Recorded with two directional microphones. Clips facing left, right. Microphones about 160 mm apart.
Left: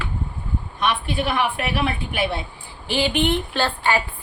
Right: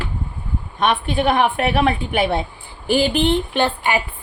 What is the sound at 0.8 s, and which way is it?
A woman's voice, 50° right (ahead or behind).